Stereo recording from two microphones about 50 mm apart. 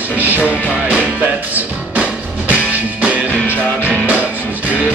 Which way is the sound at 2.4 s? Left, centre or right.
Right.